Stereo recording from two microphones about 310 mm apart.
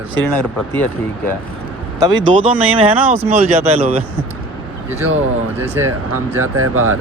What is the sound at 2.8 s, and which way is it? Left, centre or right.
Speech, centre.